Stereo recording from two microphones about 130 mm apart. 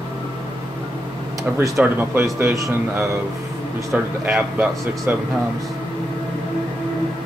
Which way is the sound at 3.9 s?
10° right (ahead or behind).